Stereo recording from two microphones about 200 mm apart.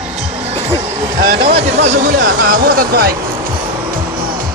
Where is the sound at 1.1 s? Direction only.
45° right (ahead or behind).